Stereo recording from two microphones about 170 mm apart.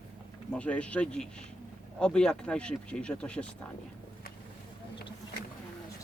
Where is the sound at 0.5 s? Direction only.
5° left (ahead or behind).